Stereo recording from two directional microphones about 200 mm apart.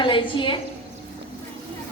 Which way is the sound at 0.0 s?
25° left (ahead or behind).